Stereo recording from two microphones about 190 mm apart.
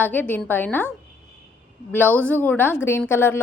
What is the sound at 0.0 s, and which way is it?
Speech, 10° left (ahead or behind).